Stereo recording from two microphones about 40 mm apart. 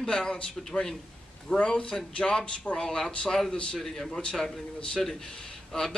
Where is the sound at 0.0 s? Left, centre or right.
Centre.